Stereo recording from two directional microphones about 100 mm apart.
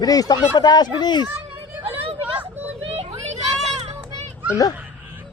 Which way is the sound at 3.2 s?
90° right.